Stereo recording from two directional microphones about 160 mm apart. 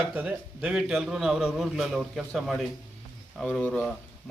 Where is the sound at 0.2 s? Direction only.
5° right (ahead or behind).